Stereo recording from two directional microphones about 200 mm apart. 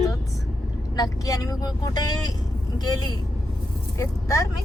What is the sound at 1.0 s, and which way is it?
Speech, 15° left (ahead or behind).